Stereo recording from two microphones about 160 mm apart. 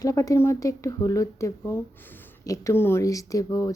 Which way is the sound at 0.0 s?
20° left (ahead or behind).